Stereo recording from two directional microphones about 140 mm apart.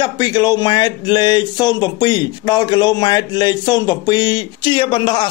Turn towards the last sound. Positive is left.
turn(degrees=35)  # may be behind; listen again after turning